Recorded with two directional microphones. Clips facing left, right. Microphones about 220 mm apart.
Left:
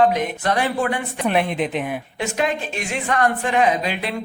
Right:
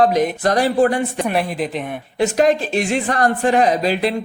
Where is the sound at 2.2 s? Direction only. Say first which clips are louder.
Right 8 dB; 35° right (ahead or behind).